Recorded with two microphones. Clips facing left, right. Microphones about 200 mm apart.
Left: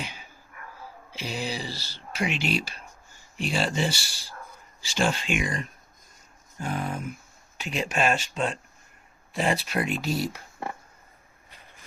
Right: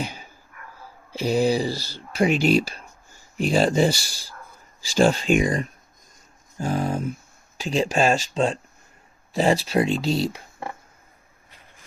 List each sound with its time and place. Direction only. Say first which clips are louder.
0.0 s dog: right 7 dB; 40° right (ahead or behind)
1.1 s speech: right 12 dB; 40° right (ahead or behind); by 10.4 s 25° right (ahead or behind)